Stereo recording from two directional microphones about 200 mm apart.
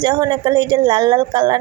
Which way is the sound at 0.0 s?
20° right (ahead or behind).